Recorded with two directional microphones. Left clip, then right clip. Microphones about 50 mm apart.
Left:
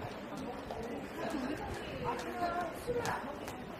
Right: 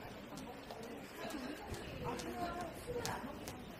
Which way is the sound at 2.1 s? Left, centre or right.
Right.